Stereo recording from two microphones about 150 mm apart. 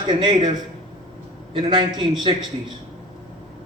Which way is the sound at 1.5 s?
30° right (ahead or behind).